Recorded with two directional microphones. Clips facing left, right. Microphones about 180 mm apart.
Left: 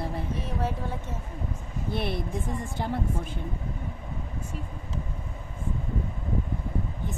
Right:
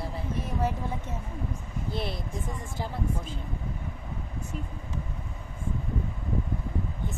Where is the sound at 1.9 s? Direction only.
60° left (ahead or behind).